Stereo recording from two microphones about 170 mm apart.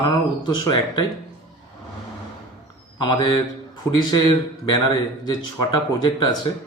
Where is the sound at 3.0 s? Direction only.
25° left (ahead or behind).